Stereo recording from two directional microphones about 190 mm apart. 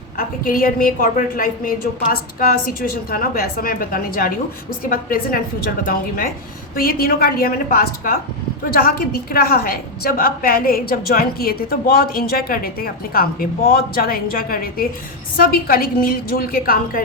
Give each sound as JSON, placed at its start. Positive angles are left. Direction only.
{"t": 0.2, "sound": "a woman's voice", "side_deg": 50}
{"t": 6.7, "sound": "a woman's voice", "side_deg": 50}